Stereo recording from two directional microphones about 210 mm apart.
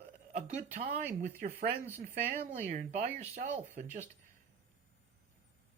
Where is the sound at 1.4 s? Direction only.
45° right (ahead or behind).